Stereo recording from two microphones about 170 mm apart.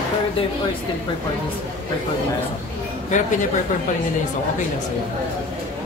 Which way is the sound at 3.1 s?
45° left (ahead or behind).